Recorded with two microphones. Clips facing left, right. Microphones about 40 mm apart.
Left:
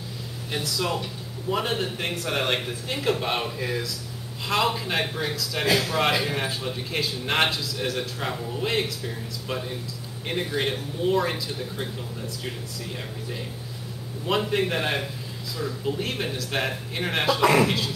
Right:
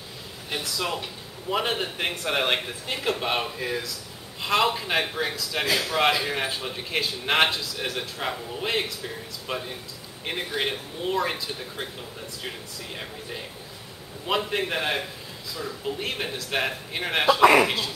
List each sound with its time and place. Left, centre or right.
0.5 s speech: centre
5.7 s a man's voice: centre